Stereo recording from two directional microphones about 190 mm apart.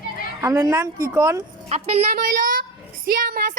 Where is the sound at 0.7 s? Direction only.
10° right (ahead or behind).